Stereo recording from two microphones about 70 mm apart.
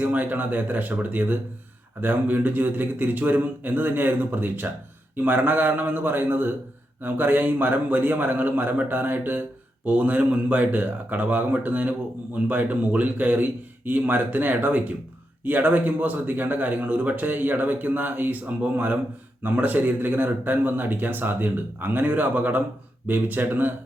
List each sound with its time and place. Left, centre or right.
0.0 s a man's voice: right